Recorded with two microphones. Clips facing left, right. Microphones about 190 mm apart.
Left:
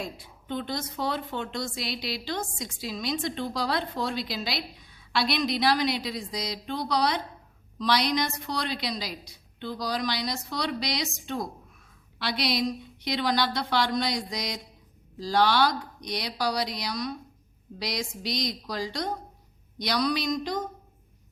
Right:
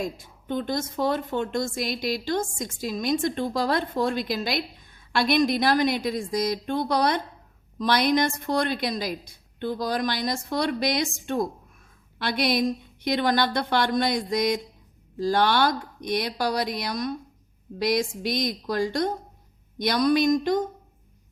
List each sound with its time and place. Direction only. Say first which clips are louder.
0.0 s speech: right 6 dB; 45° right (ahead or behind)